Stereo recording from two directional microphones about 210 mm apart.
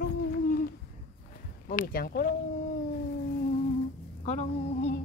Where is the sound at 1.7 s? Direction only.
45° left (ahead or behind).